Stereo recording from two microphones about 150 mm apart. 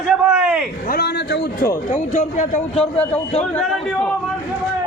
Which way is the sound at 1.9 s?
55° left (ahead or behind).